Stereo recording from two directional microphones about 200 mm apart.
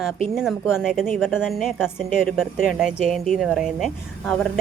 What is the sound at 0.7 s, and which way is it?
Speech, 5° right (ahead or behind).